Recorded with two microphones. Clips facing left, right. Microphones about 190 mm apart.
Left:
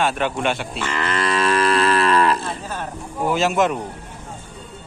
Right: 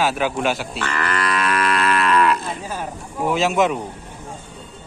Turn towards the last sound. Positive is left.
turn(degrees=0)  # may be behind; listen again after turning